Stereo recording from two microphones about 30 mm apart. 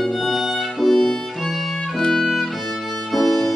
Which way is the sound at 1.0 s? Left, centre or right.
Centre.